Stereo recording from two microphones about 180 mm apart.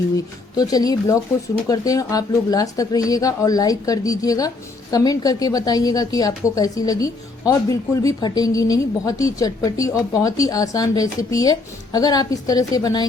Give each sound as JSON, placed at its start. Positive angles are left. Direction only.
{"t": 0.5, "sound": "speech", "side_deg": 20}